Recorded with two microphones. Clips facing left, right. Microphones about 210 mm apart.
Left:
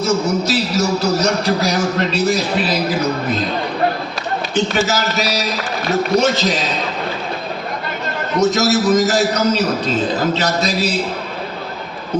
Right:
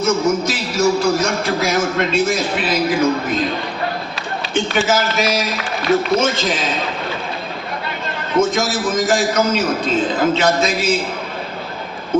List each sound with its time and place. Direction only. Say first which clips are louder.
0.0 s a man's voice: right 1 dB; 35° left (ahead or behind)
4.5 s a man's voice: right 1 dB; 40° left (ahead or behind)
8.4 s a man's voice: left 2 dB; 40° left (ahead or behind)